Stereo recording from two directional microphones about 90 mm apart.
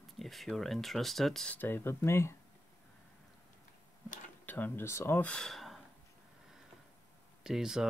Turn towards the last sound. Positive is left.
turn(degrees=-5)  # may be behind; listen again after turning